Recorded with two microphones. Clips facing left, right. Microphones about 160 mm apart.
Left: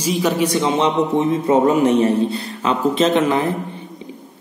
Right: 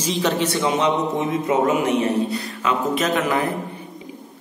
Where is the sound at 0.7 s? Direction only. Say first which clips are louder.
Left 3 dB; 30° left (ahead or behind).